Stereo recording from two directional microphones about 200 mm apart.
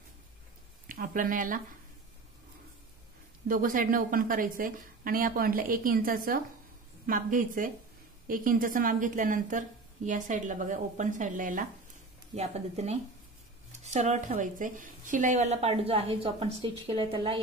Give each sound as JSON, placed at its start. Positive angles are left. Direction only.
{"t": 0.8, "sound": "speech", "side_deg": -45}
{"t": 3.4, "sound": "a woman's voice", "side_deg": -45}